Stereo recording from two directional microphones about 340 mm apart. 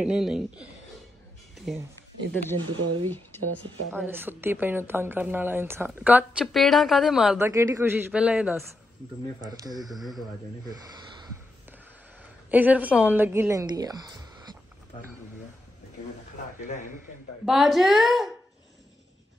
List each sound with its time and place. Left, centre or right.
0.0 s a woman's voice: centre
2.6 s speech: right
3.1 s speech: centre
3.9 s a woman's voice: centre
9.9 s a woman's voice: centre
12.4 s a woman's voice: centre
17.5 s a woman's voice: centre